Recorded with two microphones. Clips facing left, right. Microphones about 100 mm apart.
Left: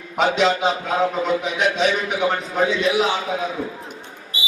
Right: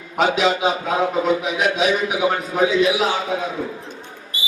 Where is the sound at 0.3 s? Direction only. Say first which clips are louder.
Even; 5° right (ahead or behind).